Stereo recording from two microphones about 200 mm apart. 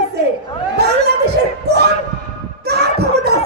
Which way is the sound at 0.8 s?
55° right (ahead or behind).